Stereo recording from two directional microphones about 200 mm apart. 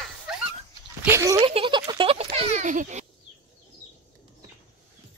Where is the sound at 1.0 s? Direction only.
15° right (ahead or behind); by 3.0 s 40° right (ahead or behind).